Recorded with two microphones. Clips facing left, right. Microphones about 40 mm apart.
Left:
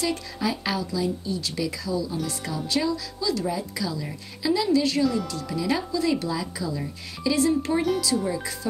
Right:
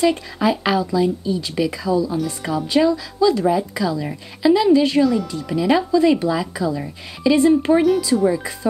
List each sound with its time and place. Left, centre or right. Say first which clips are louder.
0.0 s speech: right 9 dB; right
5.0 s speech: right 6 dB; centre
5.3 s speech: right 8 dB; right